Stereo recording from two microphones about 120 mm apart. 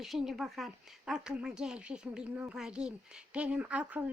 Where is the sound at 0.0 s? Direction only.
Centre (ahead or behind).